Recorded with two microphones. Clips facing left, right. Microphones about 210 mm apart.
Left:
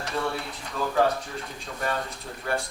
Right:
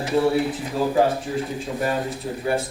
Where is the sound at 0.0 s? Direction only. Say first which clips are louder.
Right 10 dB; 20° right (ahead or behind).